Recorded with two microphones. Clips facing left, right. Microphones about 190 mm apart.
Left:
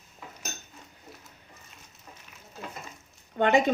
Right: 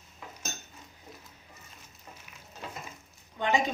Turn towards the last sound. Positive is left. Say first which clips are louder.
# left 6 dB
turn(degrees=60)  # may be behind; listen again after turning